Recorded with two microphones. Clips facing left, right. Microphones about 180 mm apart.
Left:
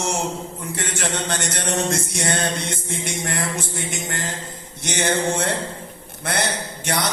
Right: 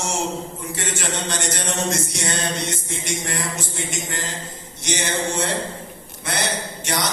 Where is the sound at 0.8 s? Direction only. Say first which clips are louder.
Left 1 dB; 55° left (ahead or behind).